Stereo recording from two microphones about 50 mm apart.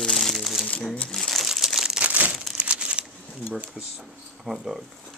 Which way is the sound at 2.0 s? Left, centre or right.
Right.